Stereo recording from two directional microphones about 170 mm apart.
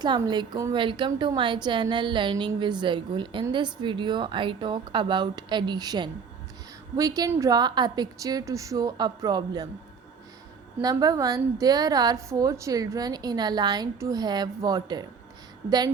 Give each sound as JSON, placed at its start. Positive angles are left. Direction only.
{"t": 0.0, "sound": "a woman's voice", "side_deg": -25}
{"t": 10.8, "sound": "a woman's voice", "side_deg": -20}